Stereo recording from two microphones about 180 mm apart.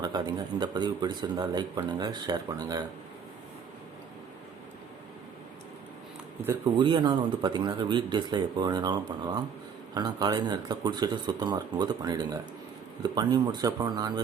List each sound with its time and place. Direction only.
0.0 s speech: 20° right (ahead or behind)
6.7 s speech: 25° right (ahead or behind)